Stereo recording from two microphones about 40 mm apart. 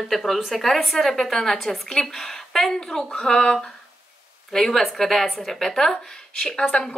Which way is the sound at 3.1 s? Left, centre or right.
Left.